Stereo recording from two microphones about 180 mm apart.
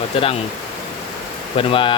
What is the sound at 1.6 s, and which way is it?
Speech, 30° left (ahead or behind).